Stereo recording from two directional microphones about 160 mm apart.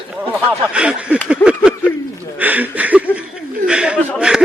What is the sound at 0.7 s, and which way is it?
Speech, 5° right (ahead or behind).